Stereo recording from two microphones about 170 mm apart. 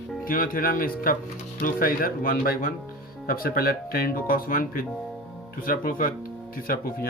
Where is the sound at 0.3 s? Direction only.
55° left (ahead or behind).